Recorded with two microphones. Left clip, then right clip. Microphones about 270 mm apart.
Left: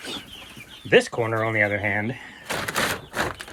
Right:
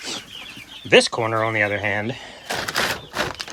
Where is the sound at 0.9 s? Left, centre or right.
Centre.